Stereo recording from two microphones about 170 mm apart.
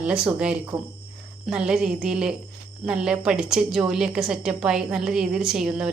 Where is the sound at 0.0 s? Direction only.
5° right (ahead or behind).